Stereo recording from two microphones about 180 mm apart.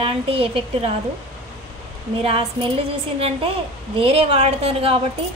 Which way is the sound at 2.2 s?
30° right (ahead or behind).